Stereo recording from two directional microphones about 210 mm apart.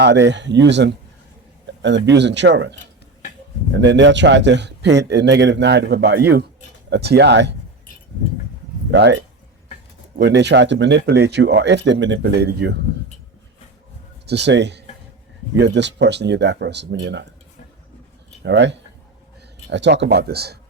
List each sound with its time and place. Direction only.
0.0 s a man's voice: 55° right (ahead or behind)
3.8 s a man's voice: 55° right (ahead or behind)
8.9 s a man's voice: 55° right (ahead or behind)
14.3 s a man's voice: 55° right (ahead or behind)
18.4 s a man's voice: 60° right (ahead or behind)